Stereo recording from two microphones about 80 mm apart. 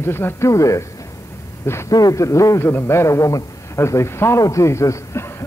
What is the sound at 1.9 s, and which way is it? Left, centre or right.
A man's voice, left.